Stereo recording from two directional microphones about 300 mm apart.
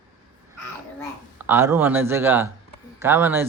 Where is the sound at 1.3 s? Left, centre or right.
Centre.